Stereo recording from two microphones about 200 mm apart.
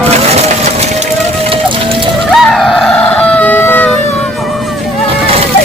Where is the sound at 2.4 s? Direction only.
Centre (ahead or behind).